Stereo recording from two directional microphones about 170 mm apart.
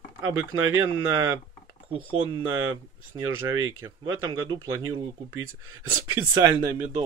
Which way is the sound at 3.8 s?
25° right (ahead or behind).